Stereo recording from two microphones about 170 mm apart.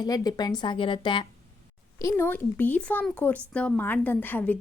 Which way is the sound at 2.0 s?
10° left (ahead or behind).